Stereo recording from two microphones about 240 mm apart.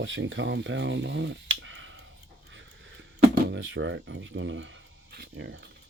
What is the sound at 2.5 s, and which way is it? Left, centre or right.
Dog, right.